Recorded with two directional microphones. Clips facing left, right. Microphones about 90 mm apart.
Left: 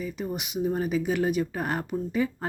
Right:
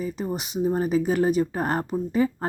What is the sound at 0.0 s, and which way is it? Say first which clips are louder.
Speech: right 3 dB; 35° right (ahead or behind).